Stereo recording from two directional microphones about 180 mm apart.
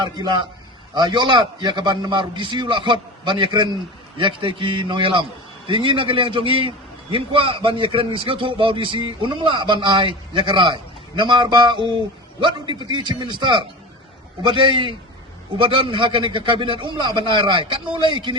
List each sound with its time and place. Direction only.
0.0 s a man's voice: 25° right (ahead or behind)